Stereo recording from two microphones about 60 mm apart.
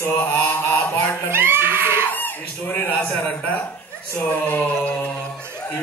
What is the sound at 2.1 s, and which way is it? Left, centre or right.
Speech, left.